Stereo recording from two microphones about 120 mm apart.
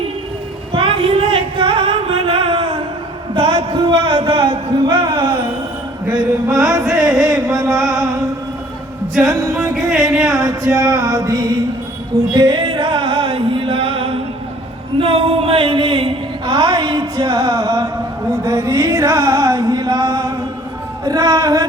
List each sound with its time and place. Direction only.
0.7 s music: 45° right (ahead or behind)
3.3 s a sound: 45° right (ahead or behind)
6.1 s mantra: 5° right (ahead or behind)
6.8 s music: centre (ahead or behind)
9.7 s music: centre (ahead or behind)
10.8 s music: 30° right (ahead or behind); by 14.2 s 50° right (ahead or behind)
14.9 s a sound: 50° right (ahead or behind); by 20.3 s 25° right (ahead or behind)
21.0 s music: 35° right (ahead or behind)